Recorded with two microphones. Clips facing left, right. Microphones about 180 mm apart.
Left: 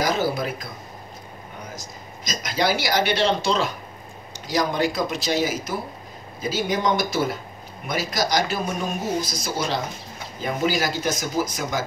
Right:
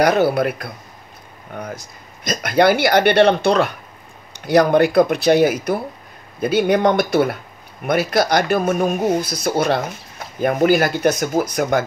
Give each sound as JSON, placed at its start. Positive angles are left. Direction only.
{"t": 0.0, "sound": "speech", "side_deg": -65}
{"t": 1.8, "sound": "speech", "side_deg": -60}